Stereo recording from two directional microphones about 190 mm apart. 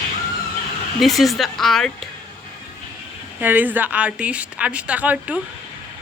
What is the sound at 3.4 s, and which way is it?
A woman's voice, 10° right (ahead or behind).